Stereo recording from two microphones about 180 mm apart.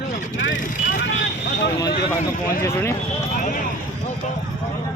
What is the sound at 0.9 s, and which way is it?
Vehicle, 75° left (ahead or behind).